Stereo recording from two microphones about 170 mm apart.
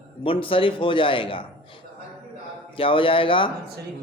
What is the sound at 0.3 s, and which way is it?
A man's voice, 30° left (ahead or behind).